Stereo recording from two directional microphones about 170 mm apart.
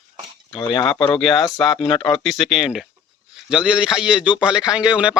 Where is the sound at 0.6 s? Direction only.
30° left (ahead or behind).